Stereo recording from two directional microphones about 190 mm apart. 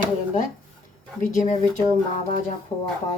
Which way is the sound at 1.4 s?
40° left (ahead or behind).